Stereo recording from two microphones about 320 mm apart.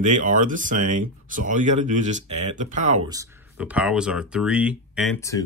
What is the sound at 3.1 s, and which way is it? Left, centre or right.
Speech, centre.